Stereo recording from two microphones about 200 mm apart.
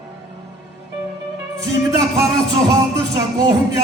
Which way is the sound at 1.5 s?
15° right (ahead or behind).